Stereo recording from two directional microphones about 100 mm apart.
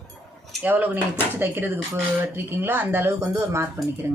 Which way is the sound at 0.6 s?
15° right (ahead or behind).